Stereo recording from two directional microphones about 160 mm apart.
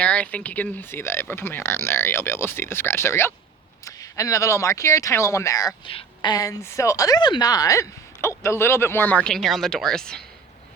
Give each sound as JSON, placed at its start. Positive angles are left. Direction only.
{"t": 0.0, "sound": "speech", "side_deg": 10}
{"t": 5.9, "sound": "a woman's voice", "side_deg": 35}
{"t": 6.3, "sound": "speech", "side_deg": 20}